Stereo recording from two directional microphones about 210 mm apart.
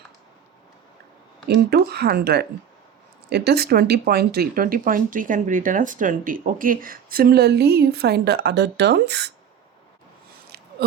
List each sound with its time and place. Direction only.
1.5 s speech: 50° right (ahead or behind)